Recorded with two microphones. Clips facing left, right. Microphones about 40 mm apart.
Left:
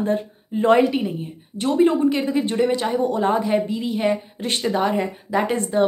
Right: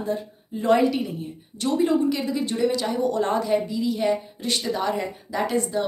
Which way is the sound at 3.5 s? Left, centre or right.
Left.